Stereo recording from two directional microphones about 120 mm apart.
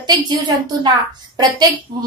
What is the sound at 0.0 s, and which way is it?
A woman's voice, 35° right (ahead or behind).